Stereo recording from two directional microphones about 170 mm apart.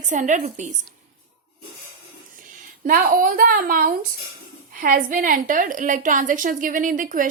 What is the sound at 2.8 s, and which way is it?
A woman's voice, 55° right (ahead or behind).